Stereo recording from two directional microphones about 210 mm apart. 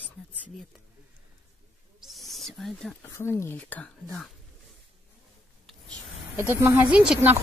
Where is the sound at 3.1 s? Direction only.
15° left (ahead or behind).